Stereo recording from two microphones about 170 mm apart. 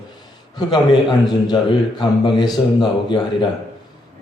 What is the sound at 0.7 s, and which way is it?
A man's voice, 25° left (ahead or behind).